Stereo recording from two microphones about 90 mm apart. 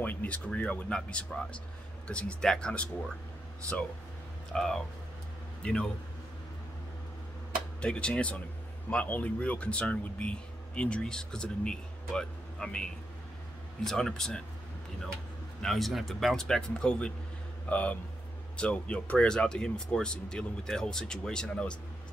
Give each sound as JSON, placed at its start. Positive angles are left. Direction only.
{"t": 0.0, "sound": "speech", "side_deg": 20}
{"t": 4.5, "sound": "a man's voice", "side_deg": 5}
{"t": 7.8, "sound": "speech", "side_deg": 10}
{"t": 15.6, "sound": "speech", "side_deg": 0}